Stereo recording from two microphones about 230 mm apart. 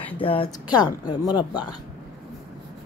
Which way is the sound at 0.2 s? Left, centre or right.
Left.